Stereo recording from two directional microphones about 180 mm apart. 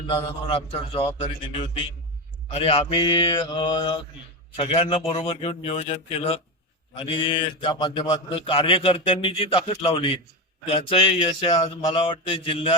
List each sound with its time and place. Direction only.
0.1 s a man's voice: 30° left (ahead or behind)